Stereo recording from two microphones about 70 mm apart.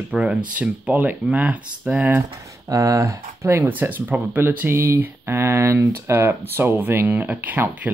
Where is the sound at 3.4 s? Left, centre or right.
Right.